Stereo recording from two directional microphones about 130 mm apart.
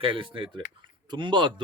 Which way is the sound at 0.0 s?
40° right (ahead or behind).